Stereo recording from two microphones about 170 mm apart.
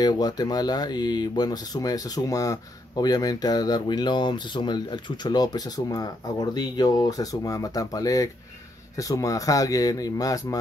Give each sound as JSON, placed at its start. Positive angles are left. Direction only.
{"t": 0.0, "sound": "speech", "side_deg": 25}